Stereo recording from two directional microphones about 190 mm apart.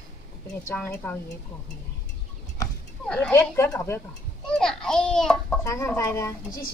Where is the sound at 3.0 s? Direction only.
5° left (ahead or behind).